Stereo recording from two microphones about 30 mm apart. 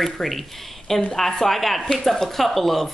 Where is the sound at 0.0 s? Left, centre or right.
Centre.